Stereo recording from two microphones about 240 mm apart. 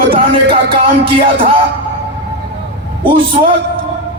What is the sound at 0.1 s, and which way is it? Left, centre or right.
Music, right.